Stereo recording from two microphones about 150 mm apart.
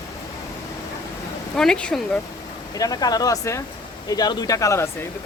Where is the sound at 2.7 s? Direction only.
25° left (ahead or behind).